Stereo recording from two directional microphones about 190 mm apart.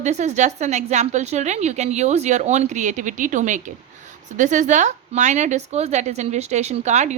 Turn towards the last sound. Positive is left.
turn(degrees=-35)  # may be behind; listen again after turning